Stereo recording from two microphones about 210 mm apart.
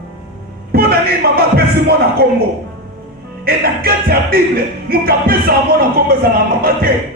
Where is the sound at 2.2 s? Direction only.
50° right (ahead or behind).